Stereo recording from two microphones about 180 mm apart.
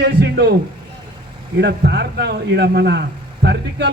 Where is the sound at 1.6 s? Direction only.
65° right (ahead or behind).